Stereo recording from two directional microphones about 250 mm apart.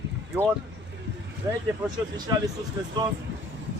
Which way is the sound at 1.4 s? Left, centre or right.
Centre.